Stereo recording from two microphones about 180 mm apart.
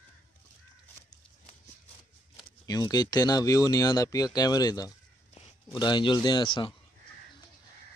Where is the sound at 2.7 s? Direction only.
20° left (ahead or behind).